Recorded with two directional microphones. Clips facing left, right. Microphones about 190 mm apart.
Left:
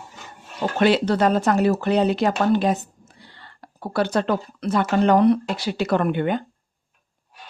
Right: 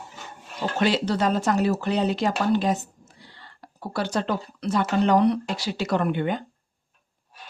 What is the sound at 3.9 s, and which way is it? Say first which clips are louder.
Speech: left 5 dB; 60° left (ahead or behind).